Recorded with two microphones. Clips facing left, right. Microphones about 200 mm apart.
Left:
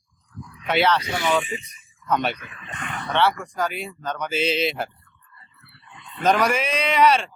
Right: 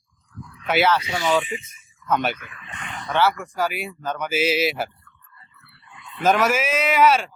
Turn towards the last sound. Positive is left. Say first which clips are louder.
# right 1 dB
turn(degrees=-5)  # may be behind; listen again after turning